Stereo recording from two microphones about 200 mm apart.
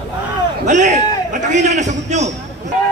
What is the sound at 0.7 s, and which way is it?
A man's voice, 40° right (ahead or behind).